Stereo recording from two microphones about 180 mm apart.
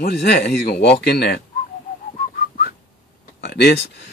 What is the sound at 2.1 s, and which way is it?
Whistling, 55° left (ahead or behind).